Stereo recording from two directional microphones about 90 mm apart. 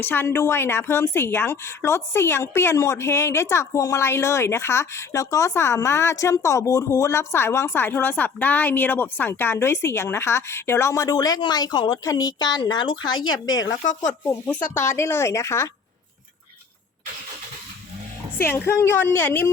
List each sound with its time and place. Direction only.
0.0 s a woman's voice: 20° left (ahead or behind); by 13.2 s 60° left (ahead or behind)
14.8 s a woman's voice: 30° left (ahead or behind)
18.4 s a woman's voice: 25° left (ahead or behind)